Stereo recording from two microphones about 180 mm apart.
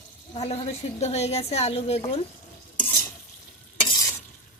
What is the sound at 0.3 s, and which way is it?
A woman's voice, 35° left (ahead or behind).